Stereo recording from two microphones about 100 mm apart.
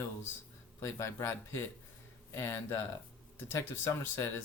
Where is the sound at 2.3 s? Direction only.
25° left (ahead or behind).